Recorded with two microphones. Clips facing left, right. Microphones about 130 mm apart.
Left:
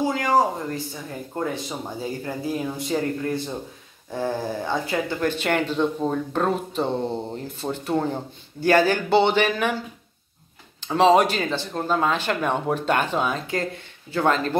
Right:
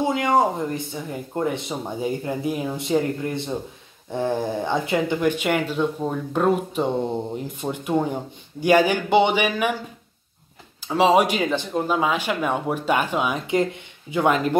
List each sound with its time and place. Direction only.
0.0 s speech: 25° right (ahead or behind)
10.8 s speech: 10° right (ahead or behind)